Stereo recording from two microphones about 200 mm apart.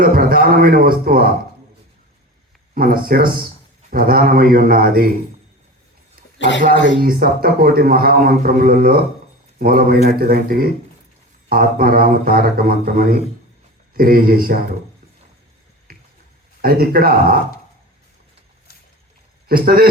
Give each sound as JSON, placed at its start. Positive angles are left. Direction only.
{"t": 0.0, "sound": "a man's voice", "side_deg": -45}
{"t": 2.7, "sound": "a man's voice", "side_deg": -45}
{"t": 6.4, "sound": "speech", "side_deg": 65}
{"t": 7.0, "sound": "a man's voice", "side_deg": -45}
{"t": 15.9, "sound": "a sound", "side_deg": -50}
{"t": 16.6, "sound": "a man's voice", "side_deg": -50}
{"t": 19.5, "sound": "a man's voice", "side_deg": -45}